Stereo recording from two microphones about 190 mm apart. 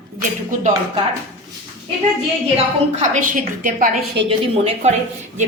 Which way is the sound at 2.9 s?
40° right (ahead or behind).